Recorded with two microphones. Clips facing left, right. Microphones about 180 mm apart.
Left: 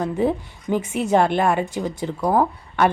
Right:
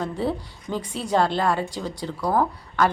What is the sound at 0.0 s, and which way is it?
A woman's voice, 15° left (ahead or behind).